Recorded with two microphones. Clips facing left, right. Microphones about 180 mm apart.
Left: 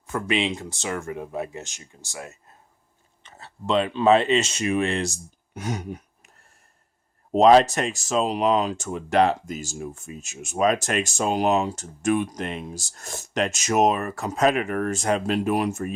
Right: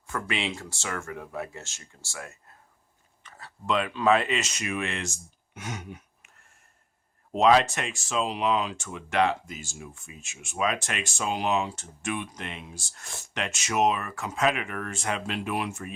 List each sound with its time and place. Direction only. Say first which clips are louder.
0.1 s speech: left 6 dB; 20° left (ahead or behind); by 15.9 s 40° left (ahead or behind)